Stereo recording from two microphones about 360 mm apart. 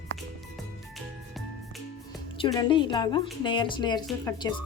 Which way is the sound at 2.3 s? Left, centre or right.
Centre.